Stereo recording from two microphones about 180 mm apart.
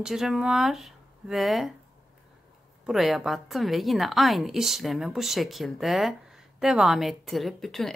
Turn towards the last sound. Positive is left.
turn(degrees=0)  # may be behind; listen again after turning